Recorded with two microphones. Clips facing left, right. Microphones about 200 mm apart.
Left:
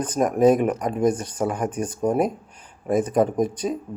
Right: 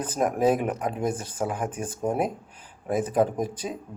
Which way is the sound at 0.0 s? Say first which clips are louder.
Left 5 dB; 5° right (ahead or behind).